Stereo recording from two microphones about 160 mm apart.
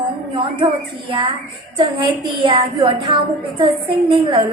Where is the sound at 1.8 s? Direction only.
30° right (ahead or behind).